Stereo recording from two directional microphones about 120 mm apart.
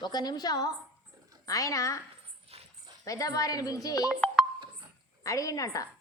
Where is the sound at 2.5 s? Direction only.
55° right (ahead or behind).